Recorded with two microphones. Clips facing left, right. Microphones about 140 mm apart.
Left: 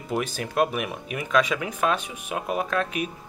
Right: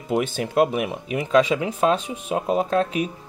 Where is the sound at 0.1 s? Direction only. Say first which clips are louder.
Right 5 dB; 25° right (ahead or behind).